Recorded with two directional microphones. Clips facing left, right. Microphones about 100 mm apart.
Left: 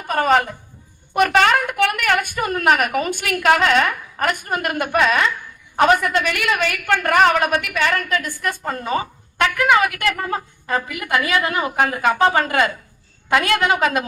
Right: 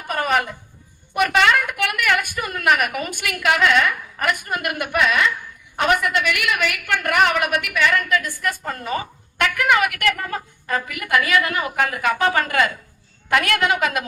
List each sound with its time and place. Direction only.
0.1 s a woman's voice: 30° left (ahead or behind)